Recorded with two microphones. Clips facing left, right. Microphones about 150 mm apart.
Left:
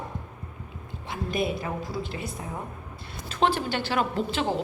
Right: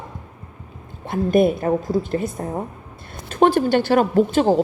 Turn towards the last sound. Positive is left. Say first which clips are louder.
# right 11 dB
turn(degrees=-45)  # may be behind; listen again after turning